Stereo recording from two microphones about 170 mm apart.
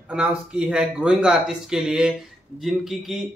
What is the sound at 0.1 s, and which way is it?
Speech, 5° right (ahead or behind).